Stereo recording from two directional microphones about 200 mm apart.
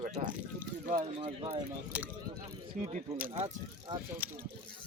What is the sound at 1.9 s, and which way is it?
Speech, 5° right (ahead or behind).